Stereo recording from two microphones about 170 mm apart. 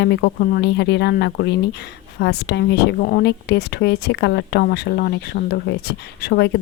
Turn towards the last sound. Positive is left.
turn(degrees=75)  # may be behind; listen again after turning